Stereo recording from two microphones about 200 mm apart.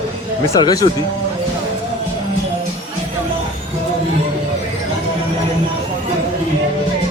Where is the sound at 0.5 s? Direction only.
20° left (ahead or behind).